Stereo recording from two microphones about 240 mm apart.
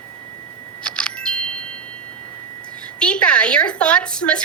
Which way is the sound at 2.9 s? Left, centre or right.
Centre.